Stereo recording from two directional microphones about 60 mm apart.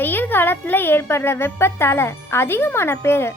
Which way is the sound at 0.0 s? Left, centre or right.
Left.